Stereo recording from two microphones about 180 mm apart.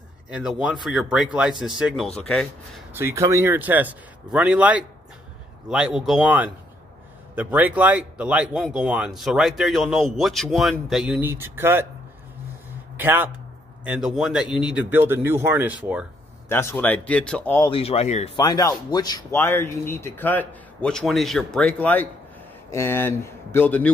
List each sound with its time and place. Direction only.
0.3 s speech: 5° right (ahead or behind)
2.9 s speech: 15° right (ahead or behind)
12.9 s speech: 10° right (ahead or behind)
16.4 s speech: 10° left (ahead or behind)
17.6 s speech: 30° left (ahead or behind)
18.3 s speech: 20° left (ahead or behind)